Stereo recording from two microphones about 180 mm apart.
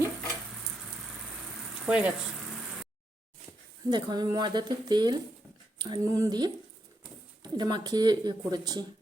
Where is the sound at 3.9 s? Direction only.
25° right (ahead or behind).